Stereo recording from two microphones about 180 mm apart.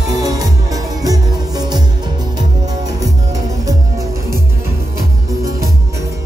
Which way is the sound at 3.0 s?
20° right (ahead or behind).